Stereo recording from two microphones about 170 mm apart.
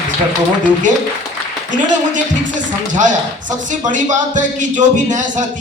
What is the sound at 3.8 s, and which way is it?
A woman's voice, 45° right (ahead or behind).